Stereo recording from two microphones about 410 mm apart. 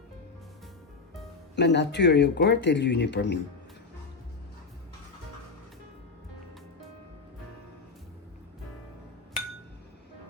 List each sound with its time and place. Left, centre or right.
1.5 s speech: left